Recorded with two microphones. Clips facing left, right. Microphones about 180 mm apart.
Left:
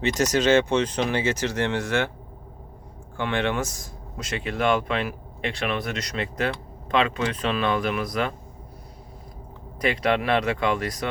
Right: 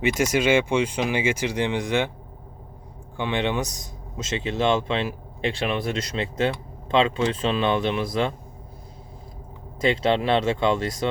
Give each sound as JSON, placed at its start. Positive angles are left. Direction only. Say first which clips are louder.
{"t": 0.0, "sound": "speech", "louder": "even", "side_deg": -10}
{"t": 3.2, "sound": "speech", "louder": "even", "side_deg": -15}
{"t": 9.8, "sound": "speech", "louder": "right 2 dB", "side_deg": -25}